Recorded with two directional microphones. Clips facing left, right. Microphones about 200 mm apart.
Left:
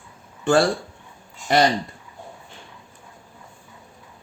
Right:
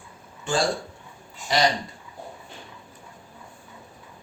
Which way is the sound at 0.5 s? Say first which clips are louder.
Left 8 dB; 60° left (ahead or behind).